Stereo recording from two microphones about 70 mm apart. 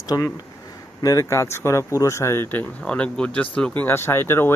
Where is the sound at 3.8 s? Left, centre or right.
Left.